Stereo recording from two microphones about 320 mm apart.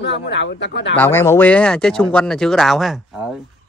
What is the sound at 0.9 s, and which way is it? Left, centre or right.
Speech, centre.